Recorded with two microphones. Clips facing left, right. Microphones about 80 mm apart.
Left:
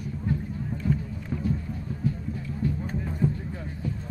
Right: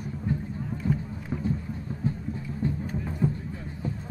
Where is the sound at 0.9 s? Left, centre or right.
Right.